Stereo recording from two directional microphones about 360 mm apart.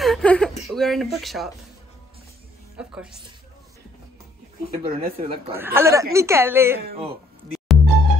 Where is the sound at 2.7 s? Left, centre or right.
Centre.